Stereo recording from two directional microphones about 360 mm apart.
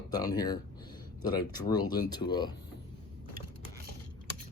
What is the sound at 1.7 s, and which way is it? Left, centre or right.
Speech, centre.